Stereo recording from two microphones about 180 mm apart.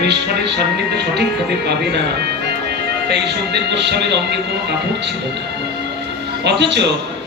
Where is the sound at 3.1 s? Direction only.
70° right (ahead or behind).